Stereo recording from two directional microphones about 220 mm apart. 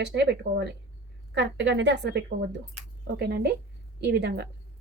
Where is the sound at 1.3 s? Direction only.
50° right (ahead or behind).